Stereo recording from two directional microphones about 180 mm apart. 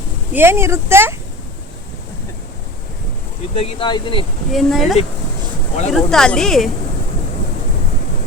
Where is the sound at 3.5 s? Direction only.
30° left (ahead or behind).